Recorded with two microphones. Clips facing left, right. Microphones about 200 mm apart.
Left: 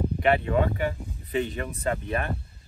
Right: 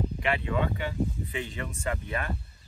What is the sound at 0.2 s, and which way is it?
Speech, 45° left (ahead or behind).